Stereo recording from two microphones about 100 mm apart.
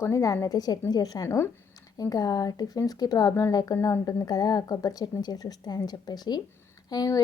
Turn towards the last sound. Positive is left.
turn(degrees=40)  # may be behind; listen again after turning